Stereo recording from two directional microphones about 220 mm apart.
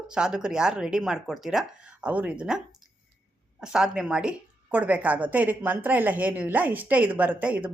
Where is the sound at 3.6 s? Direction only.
Centre (ahead or behind).